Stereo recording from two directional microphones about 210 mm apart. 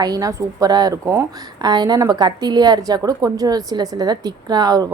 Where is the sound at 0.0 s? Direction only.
15° right (ahead or behind).